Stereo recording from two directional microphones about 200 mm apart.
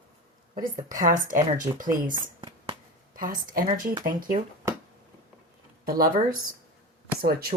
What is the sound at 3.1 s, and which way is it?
Speech, 45° right (ahead or behind).